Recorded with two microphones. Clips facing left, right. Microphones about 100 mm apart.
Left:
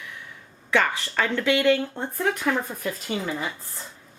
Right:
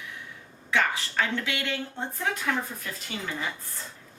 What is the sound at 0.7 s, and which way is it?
Speech, 65° left (ahead or behind).